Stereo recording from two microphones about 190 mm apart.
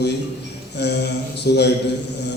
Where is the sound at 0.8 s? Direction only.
60° left (ahead or behind).